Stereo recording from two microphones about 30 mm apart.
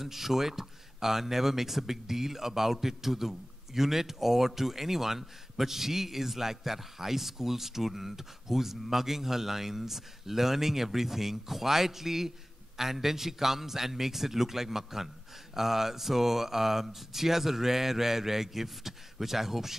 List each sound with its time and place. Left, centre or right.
0.0 s speech: centre